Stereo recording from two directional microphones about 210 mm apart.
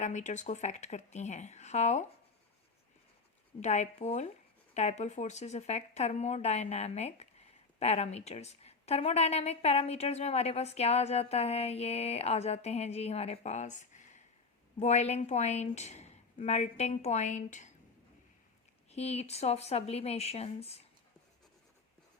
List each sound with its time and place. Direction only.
0.0 s speech: 35° left (ahead or behind)
3.6 s speech: 30° left (ahead or behind)
18.9 s speech: 30° left (ahead or behind)